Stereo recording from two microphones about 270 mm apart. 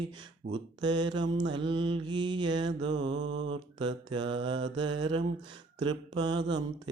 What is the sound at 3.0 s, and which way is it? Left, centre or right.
Mantra, right.